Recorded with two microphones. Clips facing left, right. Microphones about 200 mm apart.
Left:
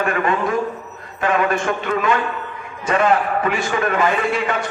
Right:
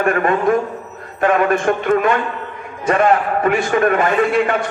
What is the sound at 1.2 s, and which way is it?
A man's voice, 50° right (ahead or behind).